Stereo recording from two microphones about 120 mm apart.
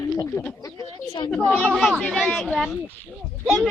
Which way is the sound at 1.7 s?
Centre (ahead or behind).